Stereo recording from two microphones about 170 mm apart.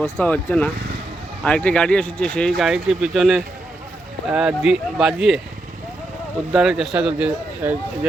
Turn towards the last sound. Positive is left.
turn(degrees=-10)  # may be behind; listen again after turning